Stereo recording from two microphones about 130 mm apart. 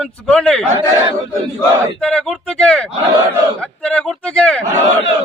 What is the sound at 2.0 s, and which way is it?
A man's voice, 5° left (ahead or behind).